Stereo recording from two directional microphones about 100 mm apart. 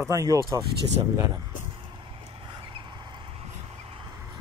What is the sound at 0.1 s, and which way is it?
Speech, 35° right (ahead or behind).